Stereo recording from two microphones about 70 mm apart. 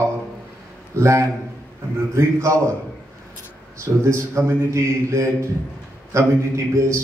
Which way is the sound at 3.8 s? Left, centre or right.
Right.